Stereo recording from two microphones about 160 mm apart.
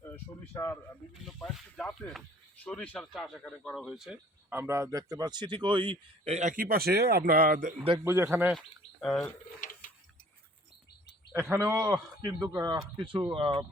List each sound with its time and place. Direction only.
0.5 s speech: 15° left (ahead or behind)
1.2 s speech: centre (ahead or behind); by 7.7 s 65° right (ahead or behind)
8.0 s speech: 15° right (ahead or behind)
8.5 s speech: 5° left (ahead or behind)
9.6 s a sound: 60° left (ahead or behind)
11.5 s speech: 20° right (ahead or behind)